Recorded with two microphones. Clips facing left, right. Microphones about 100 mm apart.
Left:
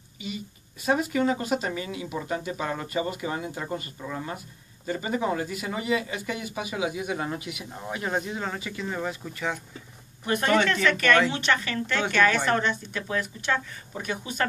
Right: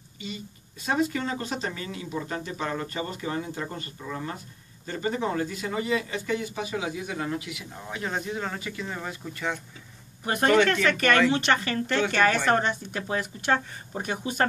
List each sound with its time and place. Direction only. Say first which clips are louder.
0.8 s speech: left 3 dB; 10° left (ahead or behind)
8.3 s speech: even; 5° left (ahead or behind)
10.6 s speech: right 1 dB; 45° right (ahead or behind)